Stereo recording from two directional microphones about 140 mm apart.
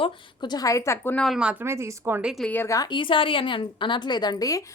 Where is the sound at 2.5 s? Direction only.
20° left (ahead or behind).